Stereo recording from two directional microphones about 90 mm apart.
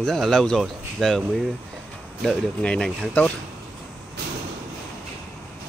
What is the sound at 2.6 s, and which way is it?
Speech, 10° left (ahead or behind).